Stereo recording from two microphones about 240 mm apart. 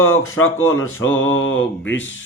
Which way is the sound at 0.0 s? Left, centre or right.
Centre.